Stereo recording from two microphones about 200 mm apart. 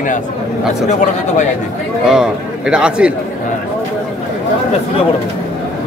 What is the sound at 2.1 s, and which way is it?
A man's voice, 5° right (ahead or behind).